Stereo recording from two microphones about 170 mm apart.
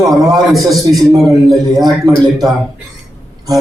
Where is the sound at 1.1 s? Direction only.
20° right (ahead or behind).